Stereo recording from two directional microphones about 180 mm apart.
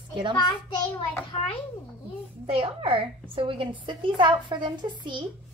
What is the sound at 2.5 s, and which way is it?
A woman's voice, 30° right (ahead or behind).